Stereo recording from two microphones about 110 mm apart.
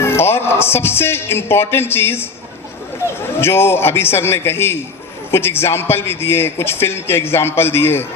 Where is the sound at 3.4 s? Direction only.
20° left (ahead or behind).